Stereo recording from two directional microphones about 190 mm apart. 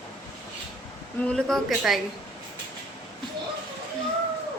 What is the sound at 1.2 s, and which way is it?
Speech, 5° left (ahead or behind).